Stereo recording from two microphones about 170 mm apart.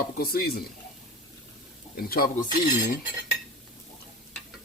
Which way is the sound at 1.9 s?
60° left (ahead or behind).